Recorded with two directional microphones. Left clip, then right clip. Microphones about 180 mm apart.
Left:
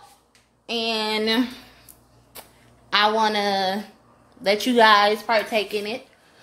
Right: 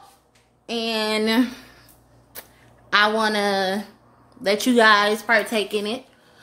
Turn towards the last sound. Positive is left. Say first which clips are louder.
# even
turn(degrees=-25)  # may be behind; listen again after turning